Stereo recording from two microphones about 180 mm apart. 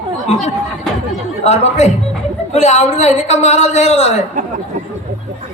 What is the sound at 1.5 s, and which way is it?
A man's voice, 35° left (ahead or behind).